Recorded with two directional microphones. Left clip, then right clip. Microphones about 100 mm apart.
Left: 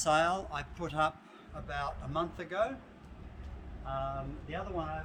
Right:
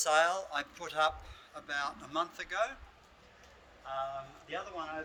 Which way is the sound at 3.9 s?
5° right (ahead or behind).